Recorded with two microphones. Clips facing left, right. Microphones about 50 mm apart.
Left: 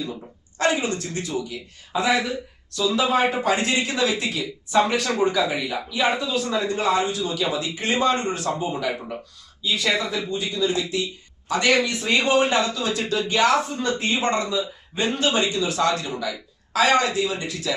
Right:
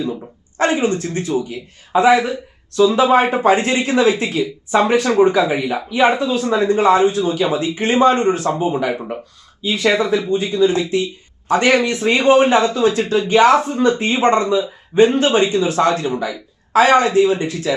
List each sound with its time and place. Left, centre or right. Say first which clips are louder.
0.0 s speech: right 8 dB; right